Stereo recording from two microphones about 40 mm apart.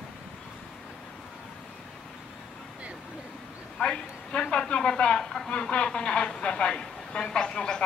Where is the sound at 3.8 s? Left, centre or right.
Left.